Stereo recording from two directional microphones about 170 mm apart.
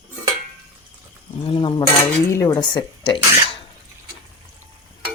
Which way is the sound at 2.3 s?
20° left (ahead or behind).